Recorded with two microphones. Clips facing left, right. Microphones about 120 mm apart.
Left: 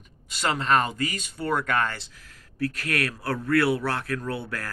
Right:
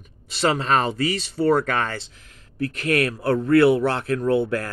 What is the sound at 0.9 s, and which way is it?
Speech, 30° right (ahead or behind).